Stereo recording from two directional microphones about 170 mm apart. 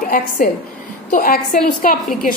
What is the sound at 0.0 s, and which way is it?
A woman's voice, 55° left (ahead or behind).